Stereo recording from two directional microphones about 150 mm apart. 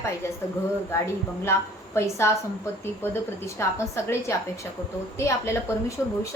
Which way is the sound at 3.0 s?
15° left (ahead or behind).